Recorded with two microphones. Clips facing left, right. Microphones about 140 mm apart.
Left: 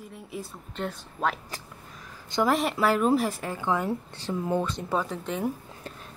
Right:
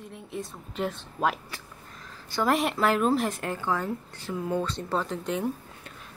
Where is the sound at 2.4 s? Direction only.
Centre (ahead or behind).